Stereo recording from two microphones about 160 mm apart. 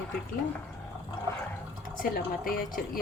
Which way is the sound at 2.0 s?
65° left (ahead or behind).